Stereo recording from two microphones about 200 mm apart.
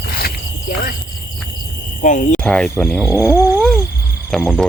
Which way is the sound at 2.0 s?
40° left (ahead or behind).